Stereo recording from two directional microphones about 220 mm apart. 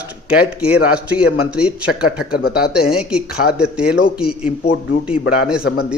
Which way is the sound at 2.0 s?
45° left (ahead or behind).